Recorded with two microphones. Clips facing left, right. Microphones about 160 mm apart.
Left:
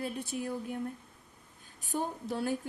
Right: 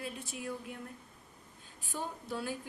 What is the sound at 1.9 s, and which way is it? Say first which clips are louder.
Speech: left 5 dB; 50° left (ahead or behind).